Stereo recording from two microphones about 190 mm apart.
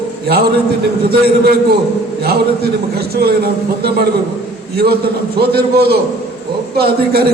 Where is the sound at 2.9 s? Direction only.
55° right (ahead or behind).